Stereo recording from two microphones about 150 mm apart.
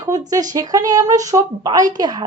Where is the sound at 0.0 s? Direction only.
25° right (ahead or behind).